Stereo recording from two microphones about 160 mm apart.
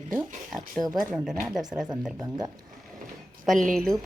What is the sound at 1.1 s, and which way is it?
Speech, 5° right (ahead or behind).